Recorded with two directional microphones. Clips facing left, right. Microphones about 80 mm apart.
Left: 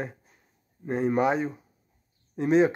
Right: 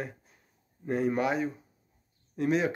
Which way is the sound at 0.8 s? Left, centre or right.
Left.